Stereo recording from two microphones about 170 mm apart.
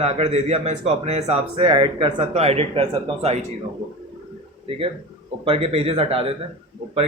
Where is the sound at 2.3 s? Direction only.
40° right (ahead or behind).